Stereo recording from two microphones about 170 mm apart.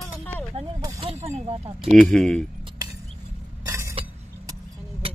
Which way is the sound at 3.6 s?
15° right (ahead or behind).